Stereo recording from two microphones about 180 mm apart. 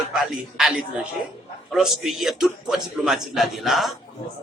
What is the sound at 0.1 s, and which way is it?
A man's voice, centre (ahead or behind).